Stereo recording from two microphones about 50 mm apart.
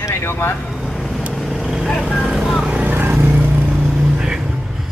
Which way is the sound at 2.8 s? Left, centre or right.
Right.